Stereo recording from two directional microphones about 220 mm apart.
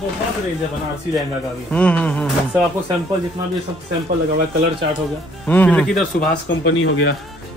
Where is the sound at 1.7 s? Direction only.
5° left (ahead or behind).